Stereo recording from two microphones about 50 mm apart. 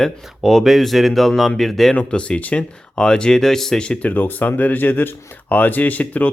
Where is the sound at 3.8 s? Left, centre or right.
Left.